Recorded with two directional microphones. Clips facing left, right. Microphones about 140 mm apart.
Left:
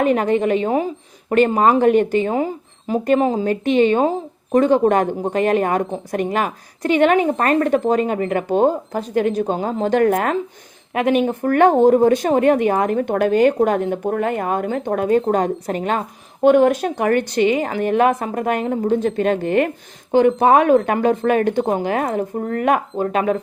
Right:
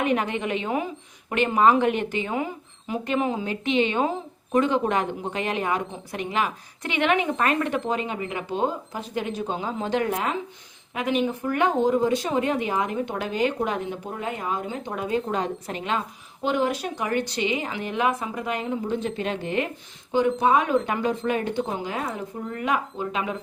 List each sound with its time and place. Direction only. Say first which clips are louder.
0.0 s speech: left 8 dB; 40° left (ahead or behind)